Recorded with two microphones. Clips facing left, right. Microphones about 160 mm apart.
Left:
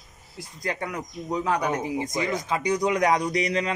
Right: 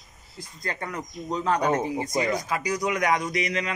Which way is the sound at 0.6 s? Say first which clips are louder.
Left 2 dB; 10° left (ahead or behind).